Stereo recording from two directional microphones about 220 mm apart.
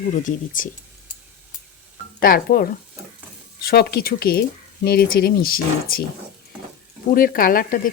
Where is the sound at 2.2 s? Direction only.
40° left (ahead or behind).